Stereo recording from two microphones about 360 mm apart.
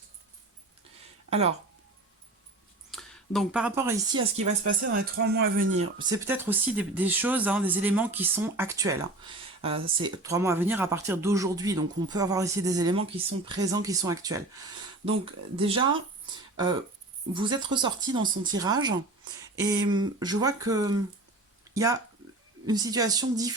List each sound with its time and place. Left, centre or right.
1.3 s speech: centre
2.9 s speech: centre
4.4 s speech: right
4.9 s speech: right
6.0 s speech: centre
17.3 s speech: centre